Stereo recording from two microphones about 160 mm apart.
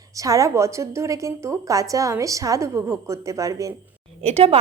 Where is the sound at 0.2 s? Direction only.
20° right (ahead or behind).